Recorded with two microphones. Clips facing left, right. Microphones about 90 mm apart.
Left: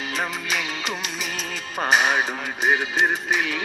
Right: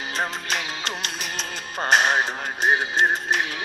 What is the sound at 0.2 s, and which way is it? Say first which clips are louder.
Music: right 1 dB; 60° right (ahead or behind).